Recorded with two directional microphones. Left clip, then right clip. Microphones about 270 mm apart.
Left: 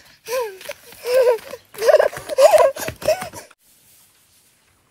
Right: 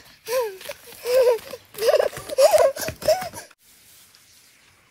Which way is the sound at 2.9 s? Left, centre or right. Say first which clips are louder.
Left 1 dB; left.